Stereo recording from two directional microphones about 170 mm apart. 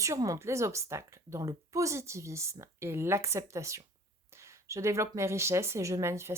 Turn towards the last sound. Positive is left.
turn(degrees=-15)  # may be behind; listen again after turning